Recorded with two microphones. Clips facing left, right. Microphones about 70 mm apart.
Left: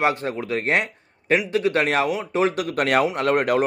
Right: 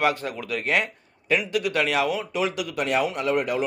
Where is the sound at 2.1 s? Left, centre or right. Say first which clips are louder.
Left 2 dB; left.